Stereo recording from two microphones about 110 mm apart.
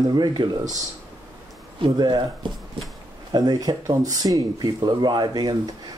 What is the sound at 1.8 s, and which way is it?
Speech, 40° right (ahead or behind).